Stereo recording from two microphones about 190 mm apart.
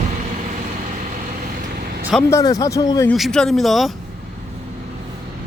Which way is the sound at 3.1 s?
5° left (ahead or behind).